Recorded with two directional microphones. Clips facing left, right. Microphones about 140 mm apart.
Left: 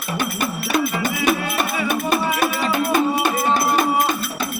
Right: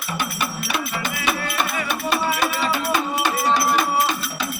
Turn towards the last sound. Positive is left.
turn(degrees=50)  # may be behind; listen again after turning